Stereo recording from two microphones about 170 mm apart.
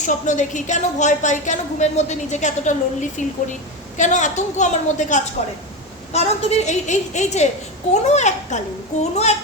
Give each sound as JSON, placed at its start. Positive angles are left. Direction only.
{"t": 0.0, "sound": "a woman's voice", "side_deg": 45}